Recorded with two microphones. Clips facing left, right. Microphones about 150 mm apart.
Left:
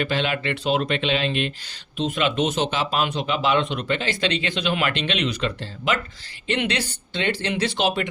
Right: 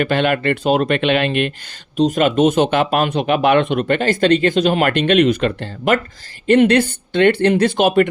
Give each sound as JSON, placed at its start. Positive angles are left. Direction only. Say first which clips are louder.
{"t": 0.0, "sound": "speech", "louder": "right 7 dB", "side_deg": -55}
{"t": 2.0, "sound": "speech", "louder": "right 9 dB", "side_deg": -40}